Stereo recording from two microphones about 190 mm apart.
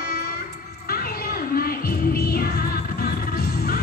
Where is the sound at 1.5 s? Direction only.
50° left (ahead or behind).